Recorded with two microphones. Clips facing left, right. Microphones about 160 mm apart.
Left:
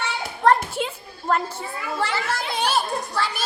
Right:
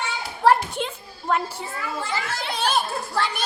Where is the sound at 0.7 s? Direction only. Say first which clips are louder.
Left 2 dB; 5° left (ahead or behind).